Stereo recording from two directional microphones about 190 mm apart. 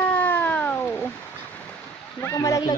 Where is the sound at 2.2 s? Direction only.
15° left (ahead or behind).